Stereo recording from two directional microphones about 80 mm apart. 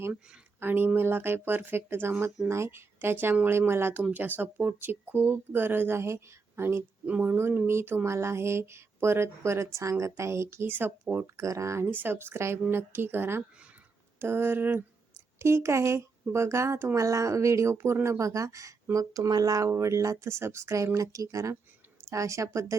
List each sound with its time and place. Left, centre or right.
0.6 s speech: right
11.3 s speech: right
11.9 s speech: right
19.7 s speech: right